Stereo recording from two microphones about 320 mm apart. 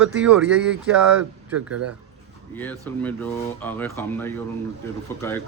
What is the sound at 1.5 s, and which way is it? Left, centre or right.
Speech, right.